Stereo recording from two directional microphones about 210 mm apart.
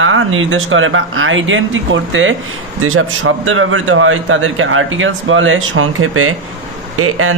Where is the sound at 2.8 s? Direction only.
75° right (ahead or behind).